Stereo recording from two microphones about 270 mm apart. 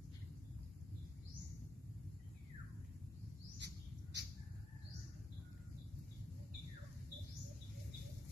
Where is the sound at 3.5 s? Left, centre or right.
Right.